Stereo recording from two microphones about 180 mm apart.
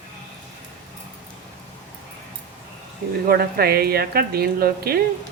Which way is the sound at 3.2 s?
55° right (ahead or behind).